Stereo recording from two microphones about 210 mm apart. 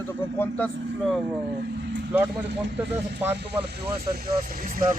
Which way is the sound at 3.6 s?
50° right (ahead or behind).